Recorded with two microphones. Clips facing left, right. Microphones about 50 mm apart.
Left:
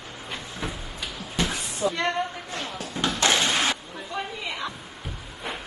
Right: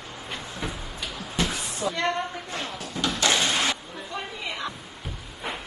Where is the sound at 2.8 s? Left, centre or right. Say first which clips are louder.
Left 1 dB; left.